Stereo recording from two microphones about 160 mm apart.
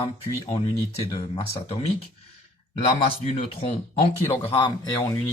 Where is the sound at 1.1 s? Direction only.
35° left (ahead or behind).